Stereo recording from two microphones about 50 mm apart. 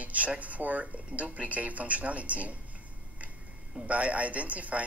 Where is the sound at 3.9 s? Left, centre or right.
Right.